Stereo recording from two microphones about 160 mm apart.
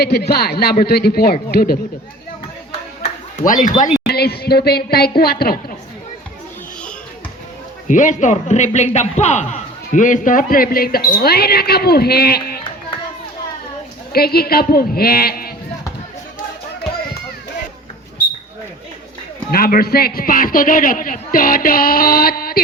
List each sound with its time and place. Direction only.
0.0 s a man's voice: 85° left
3.0 s a sound: 55° left (ahead or behind)
4.0 s a woman's voice: 80° left
7.9 s a man's voice: 50° left (ahead or behind); by 12.5 s 75° left (ahead or behind)
14.1 s a man's voice: 75° left (ahead or behind)
19.5 s a man's voice: 65° left (ahead or behind)